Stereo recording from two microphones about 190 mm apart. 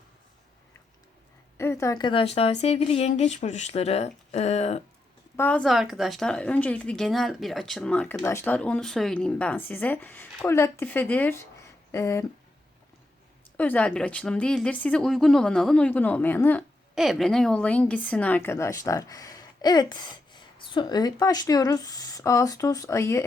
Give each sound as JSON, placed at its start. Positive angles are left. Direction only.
{"t": 1.5, "sound": "speech", "side_deg": 15}
{"t": 5.4, "sound": "a woman's voice", "side_deg": 5}
{"t": 13.6, "sound": "a woman's voice", "side_deg": 5}
{"t": 16.9, "sound": "a woman's voice", "side_deg": 0}